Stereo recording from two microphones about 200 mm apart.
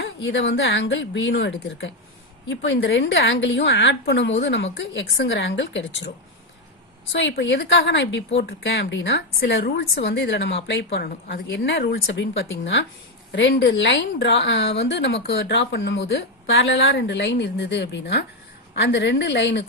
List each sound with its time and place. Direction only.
0.0 s speech: 75° left (ahead or behind)
7.1 s speech: 60° left (ahead or behind)